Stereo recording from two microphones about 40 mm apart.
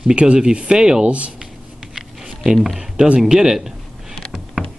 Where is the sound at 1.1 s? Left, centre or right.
Right.